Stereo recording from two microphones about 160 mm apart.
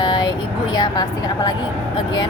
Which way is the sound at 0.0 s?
25° left (ahead or behind).